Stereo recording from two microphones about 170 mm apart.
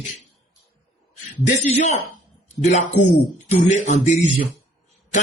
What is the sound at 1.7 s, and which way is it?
Speech, 40° left (ahead or behind).